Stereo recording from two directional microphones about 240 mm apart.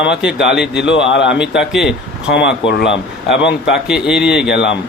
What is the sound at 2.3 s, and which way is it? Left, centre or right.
A man's voice, left.